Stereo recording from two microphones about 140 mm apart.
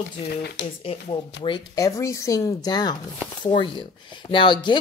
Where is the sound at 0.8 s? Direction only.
40° left (ahead or behind).